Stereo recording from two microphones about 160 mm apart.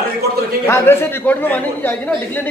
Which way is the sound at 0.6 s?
15° left (ahead or behind).